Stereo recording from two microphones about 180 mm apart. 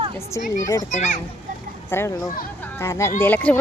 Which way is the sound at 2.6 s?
15° left (ahead or behind).